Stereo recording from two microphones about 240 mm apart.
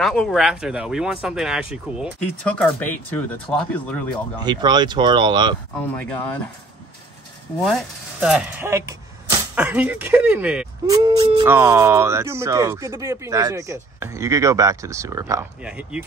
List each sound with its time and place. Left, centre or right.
0.0 s speech: centre
4.4 s speech: centre
5.9 s speech: centre
7.6 s speech: centre
10.9 s speech: centre